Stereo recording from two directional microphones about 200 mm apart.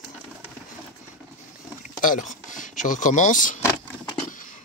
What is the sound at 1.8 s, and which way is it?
Speech, 40° left (ahead or behind).